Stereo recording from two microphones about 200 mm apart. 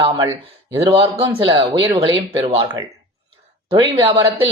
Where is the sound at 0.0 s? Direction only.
20° right (ahead or behind).